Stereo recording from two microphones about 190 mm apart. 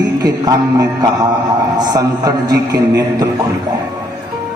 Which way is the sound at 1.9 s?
20° right (ahead or behind).